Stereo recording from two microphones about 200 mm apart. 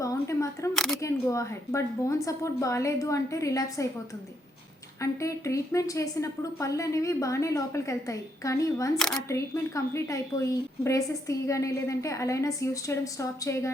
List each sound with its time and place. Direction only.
0.0 s a woman's voice: 15° left (ahead or behind)
4.9 s a woman's voice: 15° left (ahead or behind)
9.0 s speech: 5° left (ahead or behind)
9.3 s a woman's voice: 15° left (ahead or behind)